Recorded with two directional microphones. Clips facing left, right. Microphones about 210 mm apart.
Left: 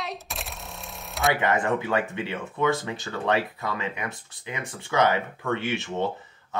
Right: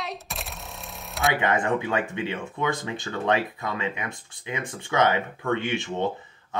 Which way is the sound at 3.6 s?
20° right (ahead or behind).